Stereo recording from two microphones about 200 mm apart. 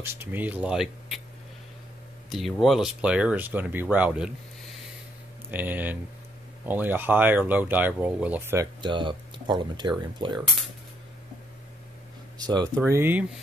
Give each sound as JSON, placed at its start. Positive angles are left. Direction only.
{"t": 0.0, "sound": "speech", "side_deg": -10}
{"t": 2.2, "sound": "speech", "side_deg": 0}
{"t": 5.5, "sound": "speech", "side_deg": -10}
{"t": 8.8, "sound": "speech", "side_deg": -25}
{"t": 12.4, "sound": "speech", "side_deg": -20}